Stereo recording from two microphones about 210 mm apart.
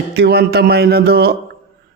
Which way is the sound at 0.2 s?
50° right (ahead or behind).